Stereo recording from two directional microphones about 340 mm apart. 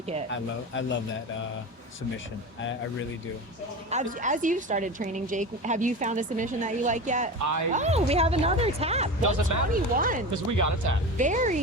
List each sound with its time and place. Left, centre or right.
0.3 s speech: left
3.8 s a woman's voice: right
9.2 s speech: right
9.7 s a woman's voice: right
10.3 s speech: right
11.2 s a woman's voice: right